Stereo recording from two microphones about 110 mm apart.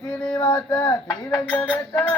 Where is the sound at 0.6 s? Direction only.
15° left (ahead or behind).